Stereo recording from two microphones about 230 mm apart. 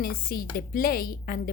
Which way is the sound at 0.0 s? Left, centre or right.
Left.